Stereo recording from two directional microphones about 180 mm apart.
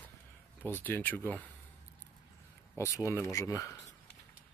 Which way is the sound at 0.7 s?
10° left (ahead or behind).